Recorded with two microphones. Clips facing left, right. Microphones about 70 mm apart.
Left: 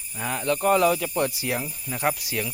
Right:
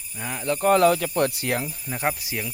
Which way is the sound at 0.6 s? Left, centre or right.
Right.